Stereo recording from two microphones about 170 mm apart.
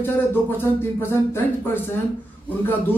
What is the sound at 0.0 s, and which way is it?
Speech, 10° left (ahead or behind).